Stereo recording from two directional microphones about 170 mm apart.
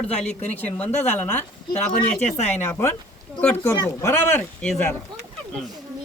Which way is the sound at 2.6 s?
15° left (ahead or behind).